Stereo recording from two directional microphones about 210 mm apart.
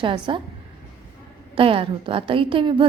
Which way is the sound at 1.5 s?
25° right (ahead or behind).